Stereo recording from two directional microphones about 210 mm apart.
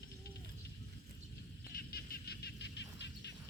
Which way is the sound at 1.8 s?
50° left (ahead or behind).